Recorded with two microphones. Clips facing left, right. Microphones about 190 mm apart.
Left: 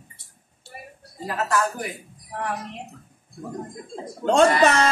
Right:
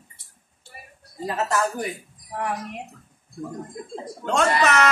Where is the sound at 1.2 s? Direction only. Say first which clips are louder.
Even; 25° right (ahead or behind).